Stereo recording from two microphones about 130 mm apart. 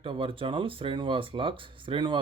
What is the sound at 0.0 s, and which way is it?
Speech, 45° right (ahead or behind).